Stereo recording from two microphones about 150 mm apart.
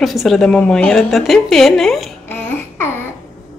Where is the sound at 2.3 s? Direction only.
15° left (ahead or behind).